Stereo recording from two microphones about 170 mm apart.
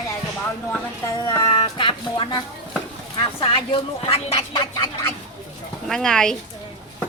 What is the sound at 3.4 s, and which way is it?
Speech, 30° left (ahead or behind).